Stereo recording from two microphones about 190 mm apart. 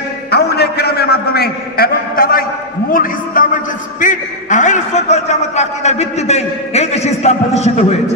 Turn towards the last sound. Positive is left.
turn(degrees=35)  # may be behind; listen again after turning